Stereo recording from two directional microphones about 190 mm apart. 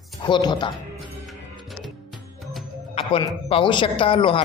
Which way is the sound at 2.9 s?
30° left (ahead or behind).